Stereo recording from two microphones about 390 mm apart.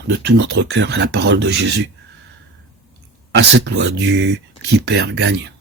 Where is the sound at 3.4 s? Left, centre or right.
Right.